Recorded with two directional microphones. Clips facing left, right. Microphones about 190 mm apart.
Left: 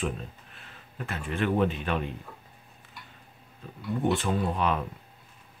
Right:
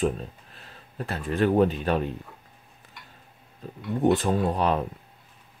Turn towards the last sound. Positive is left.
turn(degrees=-35)  # may be behind; listen again after turning